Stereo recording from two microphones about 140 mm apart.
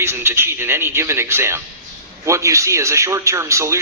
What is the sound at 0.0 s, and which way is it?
A man's voice, 20° right (ahead or behind).